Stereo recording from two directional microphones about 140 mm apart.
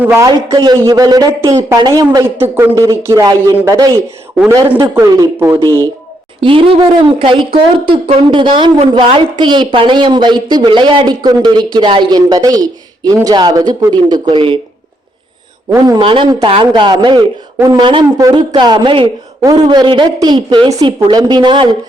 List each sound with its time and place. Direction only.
0.0 s a man's voice: 15° right (ahead or behind)
0.3 s a woman's voice: 30° right (ahead or behind)
4.7 s speech: 20° right (ahead or behind)
6.4 s a woman's voice: 40° right (ahead or behind)
16.0 s a woman's voice: 35° right (ahead or behind)